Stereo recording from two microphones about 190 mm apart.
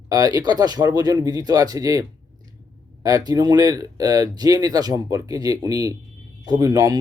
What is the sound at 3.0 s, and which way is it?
Speech, 20° right (ahead or behind).